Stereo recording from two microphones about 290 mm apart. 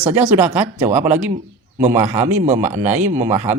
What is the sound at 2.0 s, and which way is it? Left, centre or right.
Speech, right.